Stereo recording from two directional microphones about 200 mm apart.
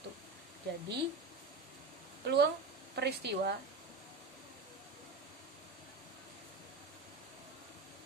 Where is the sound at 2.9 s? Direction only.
55° right (ahead or behind).